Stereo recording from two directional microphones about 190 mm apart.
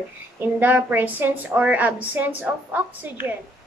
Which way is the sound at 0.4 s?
10° right (ahead or behind).